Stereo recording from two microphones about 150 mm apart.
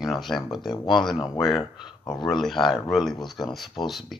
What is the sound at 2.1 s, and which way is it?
Speech, 25° left (ahead or behind).